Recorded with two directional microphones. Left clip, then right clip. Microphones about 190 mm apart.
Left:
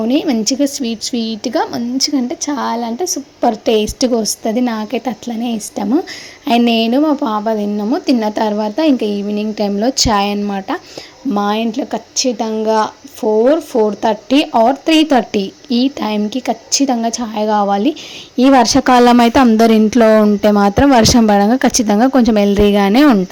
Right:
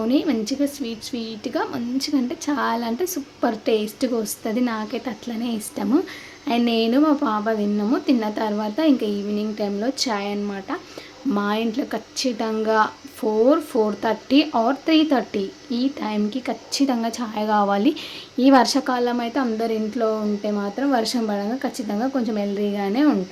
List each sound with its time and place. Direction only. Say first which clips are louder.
0.0 s speech: left 6 dB; 30° left (ahead or behind)
18.3 s speech: left 6 dB; 30° left (ahead or behind)
18.9 s speech: left 14 dB; 55° left (ahead or behind)